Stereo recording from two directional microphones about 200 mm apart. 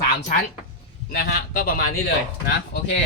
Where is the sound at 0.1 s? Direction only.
40° left (ahead or behind).